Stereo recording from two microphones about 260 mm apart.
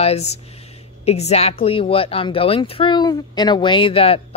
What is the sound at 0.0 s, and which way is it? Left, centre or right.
Speech, left.